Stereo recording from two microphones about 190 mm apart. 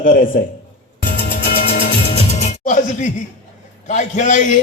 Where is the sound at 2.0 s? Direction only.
30° left (ahead or behind).